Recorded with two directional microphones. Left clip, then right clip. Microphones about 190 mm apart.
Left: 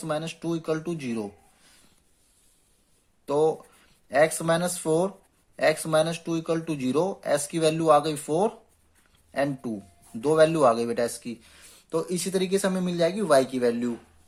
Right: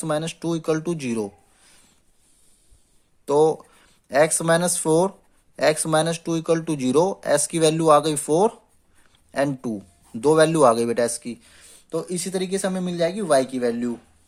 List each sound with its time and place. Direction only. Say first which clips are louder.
0.0 s speech: right 5 dB; 40° right (ahead or behind)
3.2 s speech: right 5 dB; 40° right (ahead or behind); by 13.9 s 15° right (ahead or behind)